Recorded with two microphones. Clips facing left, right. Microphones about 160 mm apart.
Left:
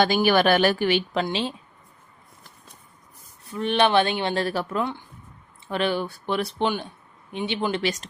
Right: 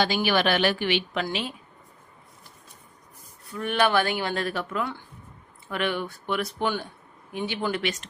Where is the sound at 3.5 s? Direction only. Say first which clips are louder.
Left 3 dB; 25° left (ahead or behind).